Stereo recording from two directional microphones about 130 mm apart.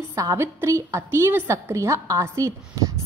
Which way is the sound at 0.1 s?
25° right (ahead or behind).